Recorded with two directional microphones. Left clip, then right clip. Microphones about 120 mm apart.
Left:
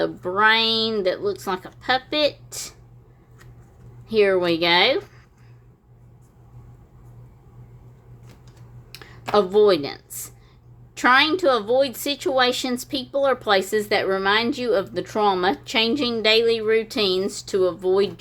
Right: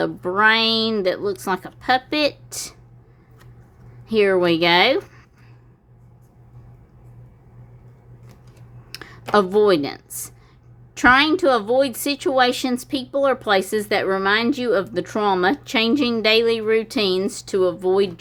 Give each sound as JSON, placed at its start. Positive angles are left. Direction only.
{"t": 0.0, "sound": "a woman's voice", "side_deg": -40}
{"t": 4.1, "sound": "a woman's voice", "side_deg": -40}
{"t": 8.9, "sound": "clicking", "side_deg": -55}
{"t": 10.9, "sound": "a woman's voice", "side_deg": -40}